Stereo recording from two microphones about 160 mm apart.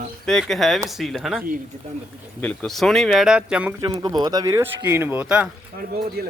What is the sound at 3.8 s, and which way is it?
Speech, 25° right (ahead or behind).